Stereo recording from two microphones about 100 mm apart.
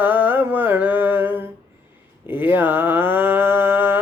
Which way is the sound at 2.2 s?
20° right (ahead or behind).